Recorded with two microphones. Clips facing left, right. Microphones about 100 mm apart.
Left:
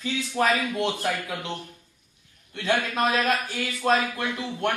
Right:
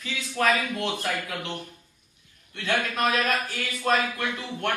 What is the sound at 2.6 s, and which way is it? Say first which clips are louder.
Speech: left 2 dB; 20° left (ahead or behind).